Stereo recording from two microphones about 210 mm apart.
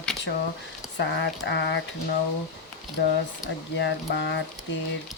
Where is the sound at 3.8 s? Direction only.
55° left (ahead or behind).